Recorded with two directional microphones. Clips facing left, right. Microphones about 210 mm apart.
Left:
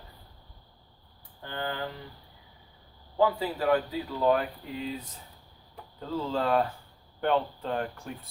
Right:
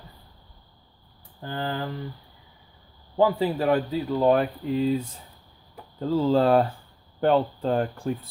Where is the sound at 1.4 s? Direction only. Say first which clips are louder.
Right 4 dB; 35° right (ahead or behind).